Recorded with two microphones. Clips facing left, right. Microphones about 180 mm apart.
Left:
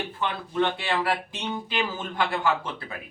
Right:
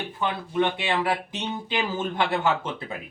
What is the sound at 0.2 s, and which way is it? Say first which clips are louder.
Speech: right 2 dB; 15° right (ahead or behind).